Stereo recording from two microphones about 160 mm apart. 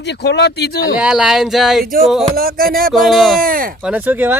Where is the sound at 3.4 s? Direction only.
60° right (ahead or behind).